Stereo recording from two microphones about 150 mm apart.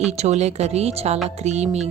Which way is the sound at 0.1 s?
50° right (ahead or behind).